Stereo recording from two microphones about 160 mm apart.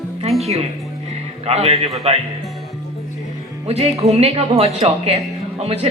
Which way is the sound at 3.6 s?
40° right (ahead or behind).